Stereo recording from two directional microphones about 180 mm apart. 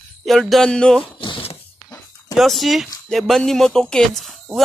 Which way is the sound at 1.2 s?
30° left (ahead or behind).